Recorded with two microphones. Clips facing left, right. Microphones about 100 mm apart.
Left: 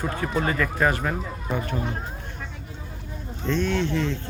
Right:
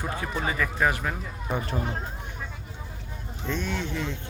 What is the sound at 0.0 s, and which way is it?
Speech, 5° right (ahead or behind).